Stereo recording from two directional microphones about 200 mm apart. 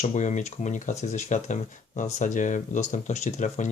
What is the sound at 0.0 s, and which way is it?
Speech, 35° left (ahead or behind).